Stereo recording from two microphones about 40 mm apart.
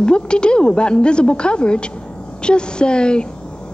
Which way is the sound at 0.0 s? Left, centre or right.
Left.